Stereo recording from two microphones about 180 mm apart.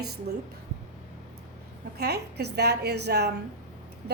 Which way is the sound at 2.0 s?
65° right (ahead or behind).